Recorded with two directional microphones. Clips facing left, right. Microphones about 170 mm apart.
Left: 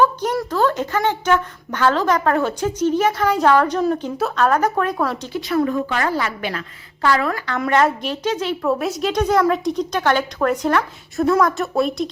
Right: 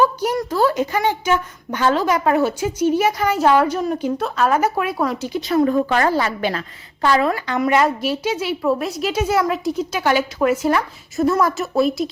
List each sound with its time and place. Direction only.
0.0 s a sound: 10° right (ahead or behind)
0.5 s a woman's voice: 10° right (ahead or behind)
5.3 s a woman's voice: 25° right (ahead or behind)
5.6 s a woman's voice: 35° right (ahead or behind); by 7.6 s 15° right (ahead or behind)
7.6 s a woman's voice: 5° right (ahead or behind)